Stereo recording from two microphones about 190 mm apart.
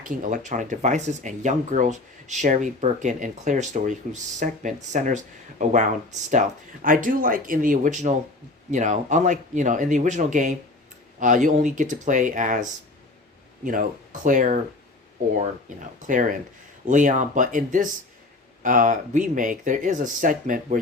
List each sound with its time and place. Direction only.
0.0 s speech: 45° right (ahead or behind)
13.7 s speech: 45° right (ahead or behind)
16.0 s speech: 45° right (ahead or behind)